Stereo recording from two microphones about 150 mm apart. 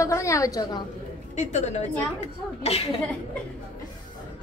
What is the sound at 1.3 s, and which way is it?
A woman's voice, 50° left (ahead or behind).